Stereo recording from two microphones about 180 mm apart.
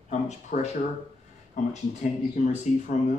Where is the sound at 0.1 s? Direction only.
40° left (ahead or behind).